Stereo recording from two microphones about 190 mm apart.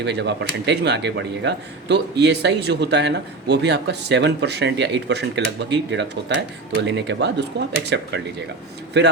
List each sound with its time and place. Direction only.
0.0 s speech: 65° right (ahead or behind)